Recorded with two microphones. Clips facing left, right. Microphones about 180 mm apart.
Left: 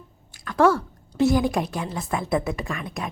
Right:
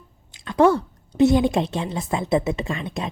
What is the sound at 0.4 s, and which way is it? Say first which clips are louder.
A woman's voice: right 2 dB; 20° right (ahead or behind).